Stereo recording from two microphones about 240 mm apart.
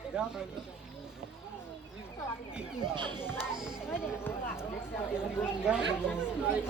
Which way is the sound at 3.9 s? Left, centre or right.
Centre.